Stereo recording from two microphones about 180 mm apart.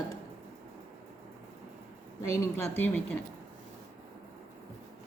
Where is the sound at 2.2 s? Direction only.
15° left (ahead or behind).